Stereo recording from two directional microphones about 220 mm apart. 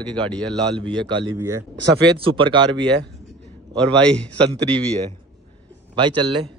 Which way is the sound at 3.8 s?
5° left (ahead or behind).